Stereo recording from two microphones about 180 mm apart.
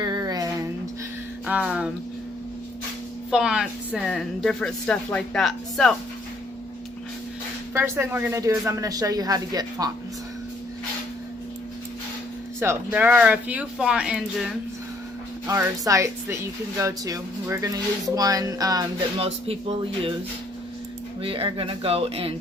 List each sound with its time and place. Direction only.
0.0 s a sound: 20° right (ahead or behind)
1.5 s speech: 5° right (ahead or behind)
3.2 s a woman's voice: 5° right (ahead or behind)
7.7 s speech: 10° right (ahead or behind)
12.5 s speech: 10° right (ahead or behind)
15.4 s speech: 15° right (ahead or behind)
19.2 s speech: 35° right (ahead or behind)
21.2 s speech: 30° right (ahead or behind)